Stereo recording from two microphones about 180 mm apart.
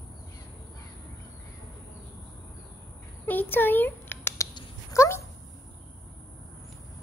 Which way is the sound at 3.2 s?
10° left (ahead or behind).